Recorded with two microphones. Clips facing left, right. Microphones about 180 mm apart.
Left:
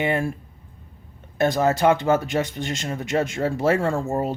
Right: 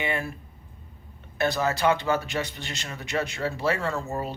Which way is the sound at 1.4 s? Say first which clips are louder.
Left 5 dB; 50° left (ahead or behind).